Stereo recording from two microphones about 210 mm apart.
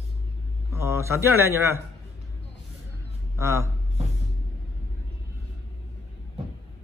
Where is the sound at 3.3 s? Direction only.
15° right (ahead or behind).